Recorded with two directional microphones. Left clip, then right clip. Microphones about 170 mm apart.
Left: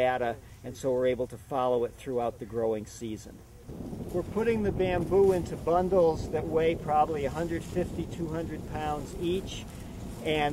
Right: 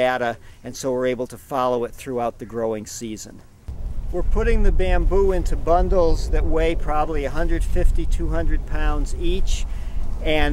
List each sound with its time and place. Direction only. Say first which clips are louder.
0.0 s speech: right 7 dB; 30° right (ahead or behind)
4.4 s speech: right 4 dB; 30° right (ahead or behind)